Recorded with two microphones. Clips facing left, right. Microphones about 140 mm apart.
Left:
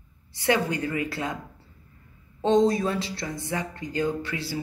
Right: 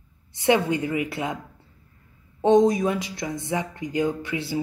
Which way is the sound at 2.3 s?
20° right (ahead or behind).